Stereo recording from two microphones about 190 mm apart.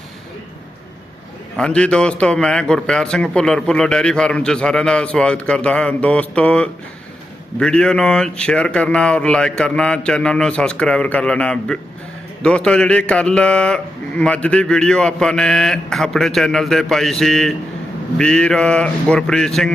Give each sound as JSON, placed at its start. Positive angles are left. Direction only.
{"t": 1.5, "sound": "speech", "side_deg": 5}